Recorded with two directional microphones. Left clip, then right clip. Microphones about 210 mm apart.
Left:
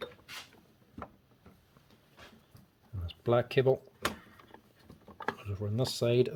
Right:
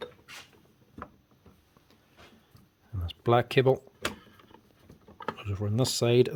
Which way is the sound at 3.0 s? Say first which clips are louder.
Right 4 dB; 40° right (ahead or behind).